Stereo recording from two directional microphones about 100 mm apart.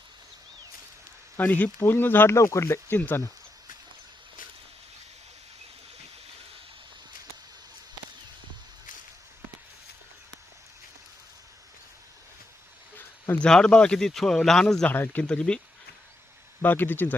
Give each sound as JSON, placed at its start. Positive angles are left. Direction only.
{"t": 1.4, "sound": "speech", "side_deg": 15}
{"t": 13.0, "sound": "speech", "side_deg": 15}
{"t": 14.8, "sound": "speech", "side_deg": 20}
{"t": 16.6, "sound": "speech", "side_deg": 20}